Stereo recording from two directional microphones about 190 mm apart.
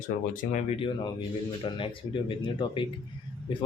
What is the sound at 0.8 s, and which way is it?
A man's voice, 25° left (ahead or behind).